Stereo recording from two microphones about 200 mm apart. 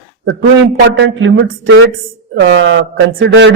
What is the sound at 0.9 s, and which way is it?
A man's voice, 70° right (ahead or behind).